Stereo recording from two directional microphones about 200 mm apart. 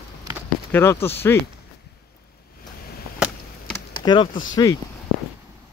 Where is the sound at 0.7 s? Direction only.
10° left (ahead or behind).